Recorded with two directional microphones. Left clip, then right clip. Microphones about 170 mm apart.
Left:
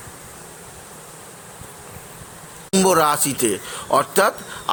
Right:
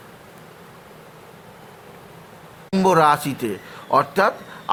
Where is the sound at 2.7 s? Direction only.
15° left (ahead or behind).